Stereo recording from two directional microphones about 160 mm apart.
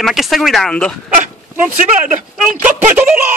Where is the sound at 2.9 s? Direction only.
10° right (ahead or behind).